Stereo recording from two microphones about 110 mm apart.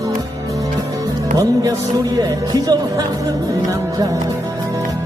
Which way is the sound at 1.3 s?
35° right (ahead or behind).